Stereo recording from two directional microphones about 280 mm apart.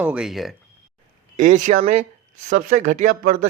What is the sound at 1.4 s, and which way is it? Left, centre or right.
A man's voice, right.